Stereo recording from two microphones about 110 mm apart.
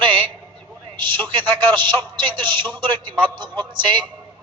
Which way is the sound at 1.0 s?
45° right (ahead or behind).